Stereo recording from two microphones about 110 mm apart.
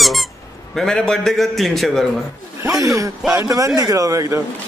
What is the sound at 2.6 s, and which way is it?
A man's voice, 30° right (ahead or behind).